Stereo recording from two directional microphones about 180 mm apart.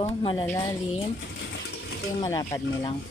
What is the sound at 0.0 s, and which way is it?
Speech, 30° left (ahead or behind).